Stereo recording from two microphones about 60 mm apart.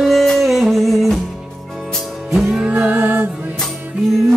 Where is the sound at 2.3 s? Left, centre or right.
Centre.